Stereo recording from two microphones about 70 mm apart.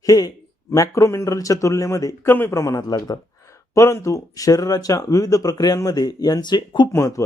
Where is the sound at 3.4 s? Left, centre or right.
Left.